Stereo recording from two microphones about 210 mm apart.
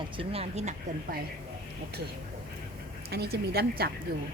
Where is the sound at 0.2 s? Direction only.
30° right (ahead or behind).